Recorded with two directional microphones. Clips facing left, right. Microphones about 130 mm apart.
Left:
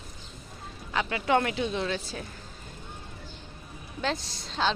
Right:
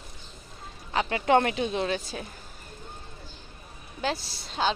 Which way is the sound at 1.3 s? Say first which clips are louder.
Right 2 dB; 25° right (ahead or behind).